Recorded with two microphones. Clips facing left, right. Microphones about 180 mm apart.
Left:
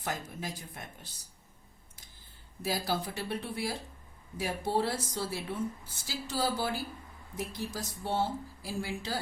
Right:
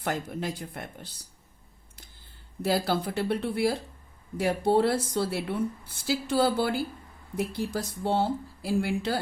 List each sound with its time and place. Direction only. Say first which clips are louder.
0.0 s speech: right 7 dB; 65° right (ahead or behind)
2.6 s speech: right 6 dB; 65° right (ahead or behind)